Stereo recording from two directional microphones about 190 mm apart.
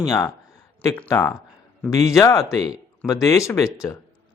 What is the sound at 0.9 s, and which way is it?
A man's voice, 15° left (ahead or behind).